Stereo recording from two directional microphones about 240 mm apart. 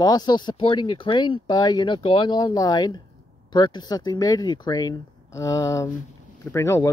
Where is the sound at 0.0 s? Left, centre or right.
Centre.